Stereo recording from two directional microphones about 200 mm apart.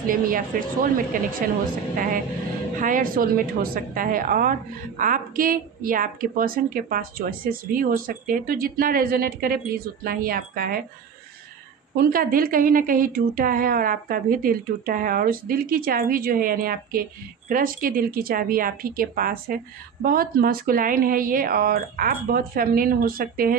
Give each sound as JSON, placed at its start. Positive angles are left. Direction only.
{"t": 0.1, "sound": "a woman's voice", "side_deg": -45}
{"t": 2.8, "sound": "a woman's voice", "side_deg": -45}
{"t": 11.9, "sound": "a woman's voice", "side_deg": -45}